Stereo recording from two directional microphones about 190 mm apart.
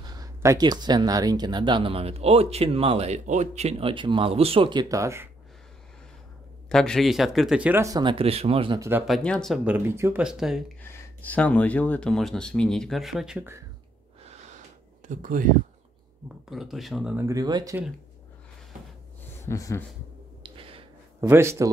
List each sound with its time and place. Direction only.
0.0 s speech: 20° right (ahead or behind)
6.7 s speech: 5° left (ahead or behind); by 8.8 s 30° right (ahead or behind)
9.0 s speech: 5° left (ahead or behind)
9.7 s speech: 10° right (ahead or behind)
10.8 s speech: 10° left (ahead or behind); by 13.6 s 5° right (ahead or behind)
15.0 s speech: 45° right (ahead or behind)
16.4 s speech: centre (ahead or behind)
17.3 s speech: 20° right (ahead or behind)
19.4 s a sound: 15° left (ahead or behind)
20.4 s a sound: 30° right (ahead or behind)
21.2 s speech: 15° right (ahead or behind)